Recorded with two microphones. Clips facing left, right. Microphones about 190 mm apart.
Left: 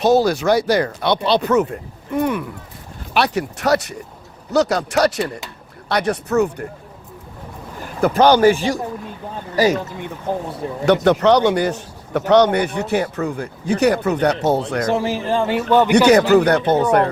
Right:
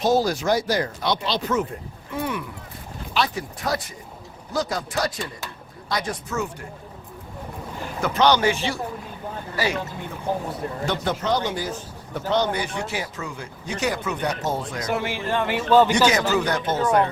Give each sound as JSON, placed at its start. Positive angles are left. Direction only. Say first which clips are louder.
{"t": 0.0, "sound": "speech", "louder": "left 6 dB", "side_deg": 65}
{"t": 3.2, "sound": "speech", "louder": "left 6 dB", "side_deg": 75}
{"t": 8.0, "sound": "speech", "louder": "left 6 dB", "side_deg": 50}
{"t": 8.4, "sound": "speech", "louder": "left 9 dB", "side_deg": 40}
{"t": 10.8, "sound": "speech", "louder": "left 12 dB", "side_deg": 70}
{"t": 14.8, "sound": "a man's voice", "louder": "left 3 dB", "side_deg": 35}
{"t": 15.9, "sound": "speech", "louder": "left 8 dB", "side_deg": 60}